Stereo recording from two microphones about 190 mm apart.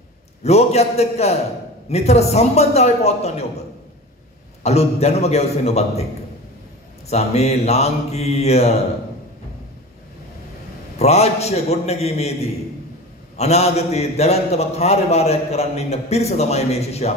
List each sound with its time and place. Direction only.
0.4 s a man's voice: 35° left (ahead or behind)
4.6 s a man's voice: 35° left (ahead or behind)
7.1 s a man's voice: 35° left (ahead or behind)
11.0 s a man's voice: 35° left (ahead or behind)
13.4 s a man's voice: 35° left (ahead or behind)